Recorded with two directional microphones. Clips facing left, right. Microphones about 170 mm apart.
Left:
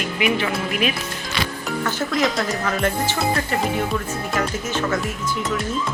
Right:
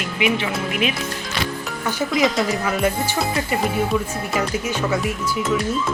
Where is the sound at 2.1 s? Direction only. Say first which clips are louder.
Right 4 dB; centre (ahead or behind).